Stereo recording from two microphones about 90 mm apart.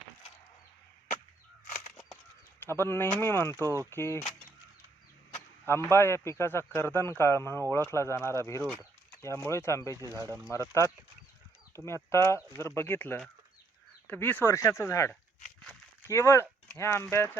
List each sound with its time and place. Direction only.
2.6 s speech: 25° left (ahead or behind)
5.3 s speech: 30° left (ahead or behind)
10.0 s speech: 40° right (ahead or behind)
11.7 s speech: 30° left (ahead or behind)
14.4 s speech: 35° left (ahead or behind)